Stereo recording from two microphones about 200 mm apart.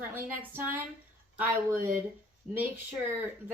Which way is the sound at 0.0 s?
10° right (ahead or behind).